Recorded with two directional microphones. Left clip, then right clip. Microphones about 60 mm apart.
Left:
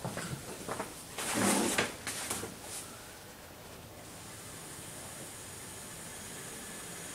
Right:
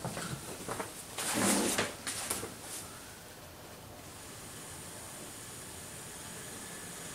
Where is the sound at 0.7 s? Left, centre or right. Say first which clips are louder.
Left 1 dB; centre.